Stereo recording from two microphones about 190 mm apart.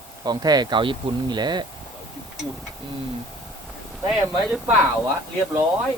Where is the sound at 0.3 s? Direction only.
20° right (ahead or behind).